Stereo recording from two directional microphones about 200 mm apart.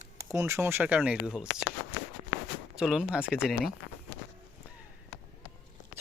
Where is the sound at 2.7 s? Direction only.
5° right (ahead or behind).